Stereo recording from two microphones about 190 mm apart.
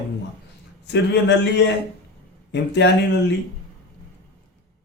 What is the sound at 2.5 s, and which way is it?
Speech, 65° left (ahead or behind).